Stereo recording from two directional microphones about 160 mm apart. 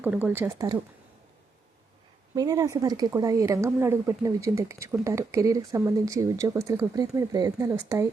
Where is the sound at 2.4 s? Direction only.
20° right (ahead or behind).